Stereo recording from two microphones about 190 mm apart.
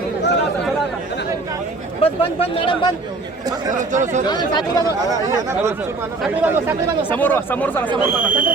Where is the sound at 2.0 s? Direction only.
30° left (ahead or behind).